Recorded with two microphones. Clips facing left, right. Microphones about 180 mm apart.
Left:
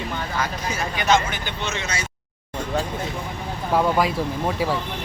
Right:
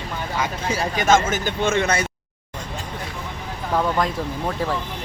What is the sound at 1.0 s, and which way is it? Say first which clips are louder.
Speech: right 2 dB; 45° right (ahead or behind).